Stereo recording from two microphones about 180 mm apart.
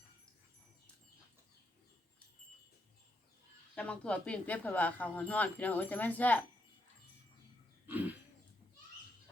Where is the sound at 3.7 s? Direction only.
5° left (ahead or behind).